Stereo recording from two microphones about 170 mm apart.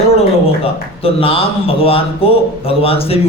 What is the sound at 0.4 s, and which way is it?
A man's voice, 35° left (ahead or behind).